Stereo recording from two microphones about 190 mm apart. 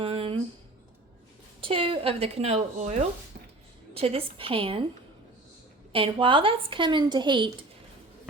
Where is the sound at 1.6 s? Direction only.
30° right (ahead or behind).